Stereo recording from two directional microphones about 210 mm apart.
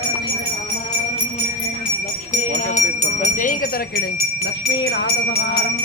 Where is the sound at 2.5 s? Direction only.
35° left (ahead or behind).